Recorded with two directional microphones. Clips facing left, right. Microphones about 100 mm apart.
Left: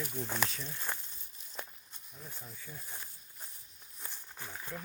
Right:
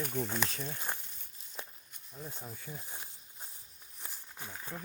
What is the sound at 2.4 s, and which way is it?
Speech, 45° right (ahead or behind).